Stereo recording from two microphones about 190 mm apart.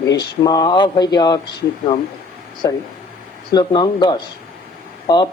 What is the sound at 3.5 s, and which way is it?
Speech, 20° left (ahead or behind).